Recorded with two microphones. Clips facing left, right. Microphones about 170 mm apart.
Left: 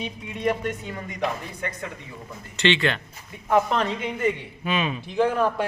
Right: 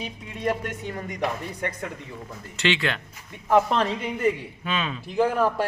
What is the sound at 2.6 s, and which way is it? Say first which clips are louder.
Speech: left 3 dB; 5° right (ahead or behind).